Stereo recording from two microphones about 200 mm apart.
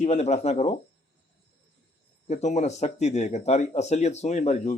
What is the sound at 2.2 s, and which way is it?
Speech, 35° left (ahead or behind).